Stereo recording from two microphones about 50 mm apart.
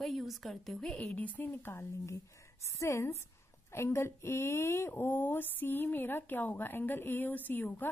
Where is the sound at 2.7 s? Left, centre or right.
Left.